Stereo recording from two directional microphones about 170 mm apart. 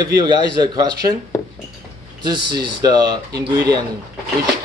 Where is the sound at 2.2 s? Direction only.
25° right (ahead or behind).